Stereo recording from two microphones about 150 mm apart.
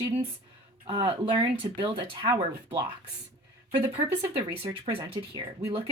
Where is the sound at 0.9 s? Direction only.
35° right (ahead or behind).